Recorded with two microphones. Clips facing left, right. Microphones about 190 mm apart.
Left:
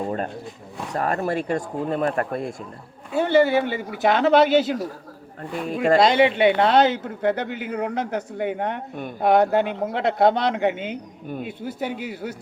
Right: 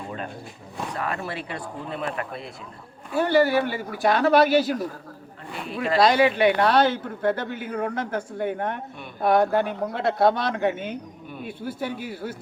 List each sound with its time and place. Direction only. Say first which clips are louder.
0.9 s speech: left 8 dB; 45° left (ahead or behind)
3.1 s a man's voice: left 2 dB; 20° left (ahead or behind)
5.6 s speech: left 7 dB; 45° left (ahead or behind)
6.0 s a man's voice: right 1 dB; 25° left (ahead or behind)